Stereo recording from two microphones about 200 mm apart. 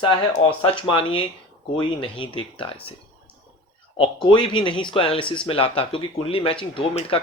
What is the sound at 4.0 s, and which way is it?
Speech, 25° left (ahead or behind).